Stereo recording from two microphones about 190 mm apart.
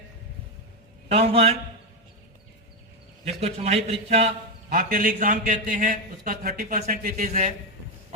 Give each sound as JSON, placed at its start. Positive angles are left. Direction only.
{"t": 1.0, "sound": "a man's voice", "side_deg": -30}
{"t": 3.2, "sound": "a man's voice", "side_deg": -35}
{"t": 4.7, "sound": "a man's voice", "side_deg": -50}